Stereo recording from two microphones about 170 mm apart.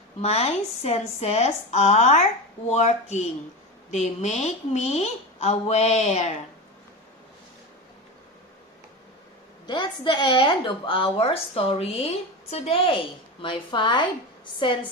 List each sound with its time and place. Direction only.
0.2 s a woman's voice: 40° left (ahead or behind)
9.6 s a woman's voice: 25° left (ahead or behind)